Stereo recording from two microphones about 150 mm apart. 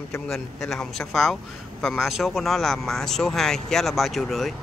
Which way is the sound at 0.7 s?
Centre (ahead or behind).